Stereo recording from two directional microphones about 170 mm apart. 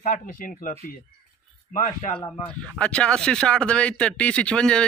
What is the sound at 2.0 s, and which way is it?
Speech, 45° left (ahead or behind).